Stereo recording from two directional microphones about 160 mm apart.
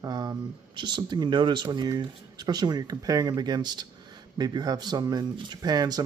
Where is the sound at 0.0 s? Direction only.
25° right (ahead or behind).